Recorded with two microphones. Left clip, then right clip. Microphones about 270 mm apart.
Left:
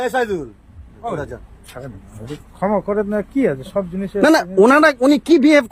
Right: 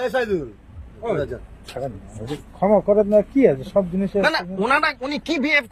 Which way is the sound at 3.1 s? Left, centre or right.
Centre.